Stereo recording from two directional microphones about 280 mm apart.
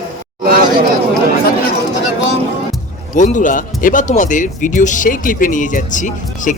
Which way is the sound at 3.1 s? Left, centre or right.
Left.